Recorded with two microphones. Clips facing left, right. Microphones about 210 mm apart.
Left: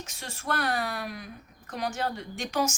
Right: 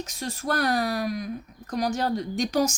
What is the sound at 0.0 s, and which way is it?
Speech, 40° right (ahead or behind).